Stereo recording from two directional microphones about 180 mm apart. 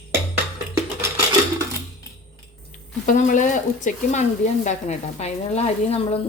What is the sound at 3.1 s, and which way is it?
Speech, 45° left (ahead or behind).